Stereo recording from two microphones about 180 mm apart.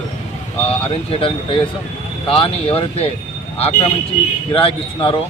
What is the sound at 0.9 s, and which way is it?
Speech, 30° left (ahead or behind).